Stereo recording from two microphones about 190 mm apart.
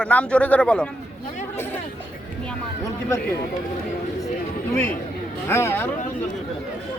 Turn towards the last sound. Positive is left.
turn(degrees=10)  # may be behind; listen again after turning